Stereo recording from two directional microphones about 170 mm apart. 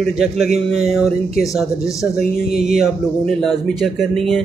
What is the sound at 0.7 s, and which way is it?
A man's voice, centre (ahead or behind).